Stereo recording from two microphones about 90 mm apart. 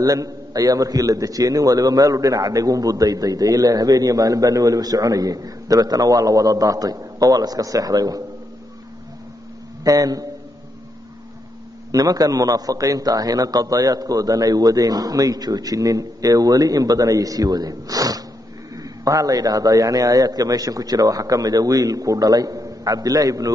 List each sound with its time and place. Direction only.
0.0 s a man's voice: 45° right (ahead or behind)
9.8 s a man's voice: 45° right (ahead or behind)
11.9 s a man's voice: 45° right (ahead or behind)